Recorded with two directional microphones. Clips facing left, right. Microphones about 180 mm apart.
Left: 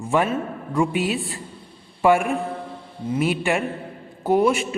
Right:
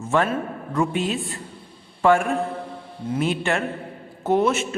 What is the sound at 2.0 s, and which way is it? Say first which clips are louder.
A man's voice: even; 15° left (ahead or behind).